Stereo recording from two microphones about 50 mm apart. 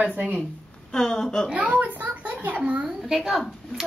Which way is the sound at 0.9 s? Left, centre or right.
Centre.